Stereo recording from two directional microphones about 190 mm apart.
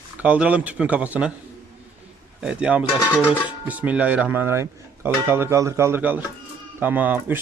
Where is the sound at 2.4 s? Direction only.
5° right (ahead or behind).